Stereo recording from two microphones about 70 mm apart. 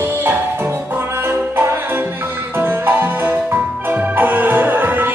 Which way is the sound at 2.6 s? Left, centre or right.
Right.